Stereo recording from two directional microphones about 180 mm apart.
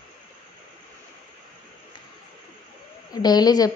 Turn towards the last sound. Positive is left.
turn(degrees=20)  # may be behind; listen again after turning